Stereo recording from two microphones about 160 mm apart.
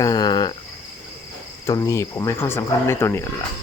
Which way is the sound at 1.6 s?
20° left (ahead or behind).